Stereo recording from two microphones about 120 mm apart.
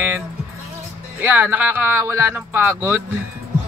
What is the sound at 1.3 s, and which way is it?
Music, 15° right (ahead or behind).